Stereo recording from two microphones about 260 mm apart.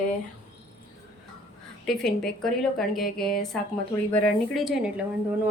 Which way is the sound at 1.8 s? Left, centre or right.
Centre.